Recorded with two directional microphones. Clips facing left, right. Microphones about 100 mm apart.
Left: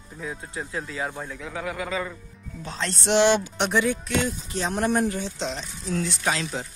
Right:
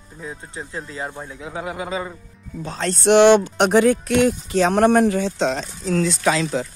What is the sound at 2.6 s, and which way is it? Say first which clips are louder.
Speech: right 8 dB; 45° right (ahead or behind).